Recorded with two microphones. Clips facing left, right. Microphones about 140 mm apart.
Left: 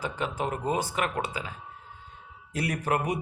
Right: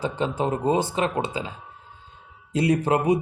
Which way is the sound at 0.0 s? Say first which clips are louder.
Right 6 dB; 30° right (ahead or behind).